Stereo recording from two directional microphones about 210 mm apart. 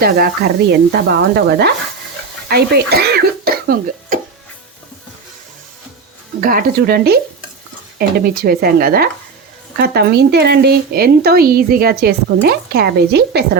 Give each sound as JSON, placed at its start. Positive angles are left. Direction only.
{"t": 0.0, "sound": "speech", "side_deg": -50}
{"t": 6.4, "sound": "speech", "side_deg": -45}